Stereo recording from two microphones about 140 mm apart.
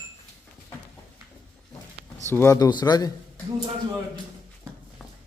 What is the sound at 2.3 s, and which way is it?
Speech, 20° left (ahead or behind).